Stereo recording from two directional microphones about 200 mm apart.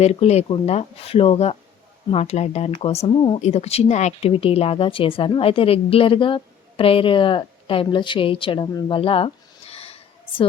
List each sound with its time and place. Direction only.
0.0 s speech: 30° left (ahead or behind)